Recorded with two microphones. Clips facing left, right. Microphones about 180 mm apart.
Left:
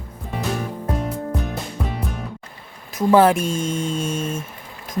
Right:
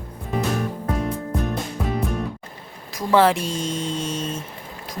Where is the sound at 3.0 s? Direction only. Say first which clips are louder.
Left 3 dB; 25° left (ahead or behind).